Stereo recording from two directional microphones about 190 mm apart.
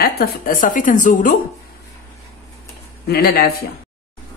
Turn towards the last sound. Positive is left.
turn(degrees=55)  # may be behind; listen again after turning